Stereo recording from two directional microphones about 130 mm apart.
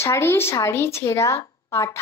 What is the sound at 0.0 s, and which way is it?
A woman's voice, 20° left (ahead or behind).